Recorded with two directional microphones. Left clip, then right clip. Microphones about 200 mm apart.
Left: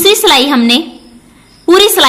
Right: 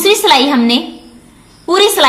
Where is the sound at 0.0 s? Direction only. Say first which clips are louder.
Left 2 dB; 40° left (ahead or behind).